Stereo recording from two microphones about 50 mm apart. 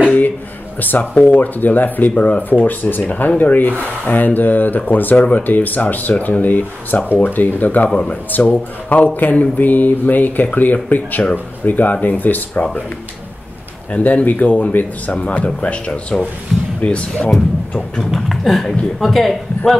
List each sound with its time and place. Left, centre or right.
0.7 s speech: left
2.6 s speech: left
13.9 s speech: left
15.1 s speech: left
18.1 s speech: centre